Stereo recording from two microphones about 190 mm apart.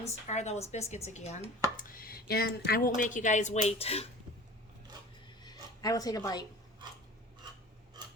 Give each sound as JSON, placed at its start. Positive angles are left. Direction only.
{"t": 0.0, "sound": "speech", "side_deg": 35}
{"t": 1.9, "sound": "speech", "side_deg": 50}
{"t": 5.4, "sound": "a sound", "side_deg": 20}